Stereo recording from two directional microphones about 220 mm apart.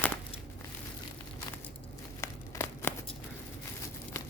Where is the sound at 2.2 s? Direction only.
10° left (ahead or behind).